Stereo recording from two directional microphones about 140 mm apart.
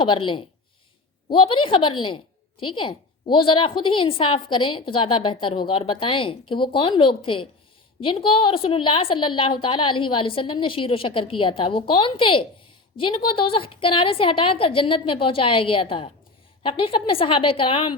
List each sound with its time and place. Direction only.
0.0 s a woman's voice: 35° left (ahead or behind)